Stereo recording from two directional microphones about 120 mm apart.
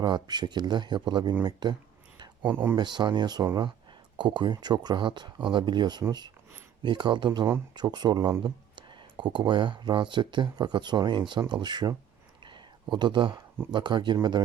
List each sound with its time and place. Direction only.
0.0 s speech: 35° right (ahead or behind)
2.4 s speech: 15° right (ahead or behind)
2.7 s speech: 40° right (ahead or behind)
8.4 s a sound: 40° right (ahead or behind)
9.5 s speech: 45° right (ahead or behind)
12.4 s a sound: 40° right (ahead or behind)
13.7 s speech: 40° right (ahead or behind)